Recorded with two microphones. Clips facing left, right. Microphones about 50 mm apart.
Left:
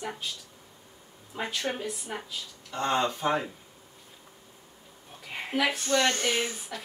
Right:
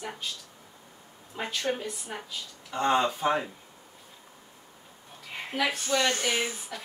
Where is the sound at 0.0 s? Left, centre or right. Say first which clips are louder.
Left 1 dB; centre.